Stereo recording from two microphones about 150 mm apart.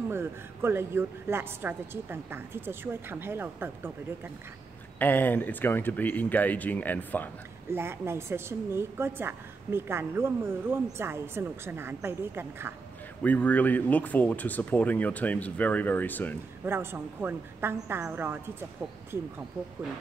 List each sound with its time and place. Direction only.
0.1 s a woman's voice: 15° right (ahead or behind)
4.9 s speech: 10° left (ahead or behind)
7.7 s a woman's voice: 15° right (ahead or behind)
13.2 s speech: 10° left (ahead or behind)
16.6 s a woman's voice: 15° right (ahead or behind)